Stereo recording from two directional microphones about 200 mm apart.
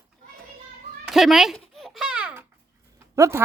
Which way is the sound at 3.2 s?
15° right (ahead or behind).